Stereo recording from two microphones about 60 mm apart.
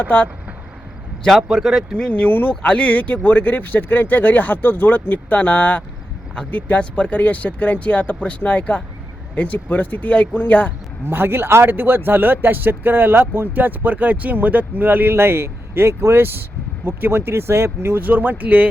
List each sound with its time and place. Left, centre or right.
0.0 s speech: left
1.4 s speech: centre
2.0 s speech: left
11.0 s speech: right
18.0 s speech: right